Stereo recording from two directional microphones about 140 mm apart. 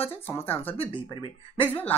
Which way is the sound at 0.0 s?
15° left (ahead or behind).